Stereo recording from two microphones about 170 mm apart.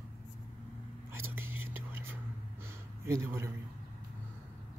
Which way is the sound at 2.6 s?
15° right (ahead or behind).